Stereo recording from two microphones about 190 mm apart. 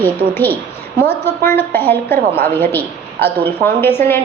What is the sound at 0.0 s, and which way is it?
A woman's voice, 10° left (ahead or behind).